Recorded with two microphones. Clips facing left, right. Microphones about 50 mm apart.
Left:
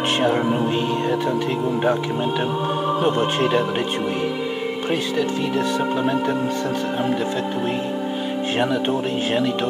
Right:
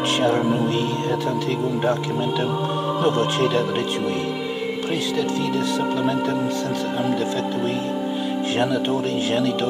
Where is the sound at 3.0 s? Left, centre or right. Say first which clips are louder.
Right 1 dB; centre.